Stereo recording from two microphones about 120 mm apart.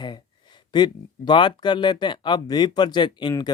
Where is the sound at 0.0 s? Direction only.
40° left (ahead or behind).